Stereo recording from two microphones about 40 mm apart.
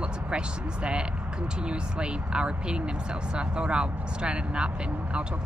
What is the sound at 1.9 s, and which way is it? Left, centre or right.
Speech, right.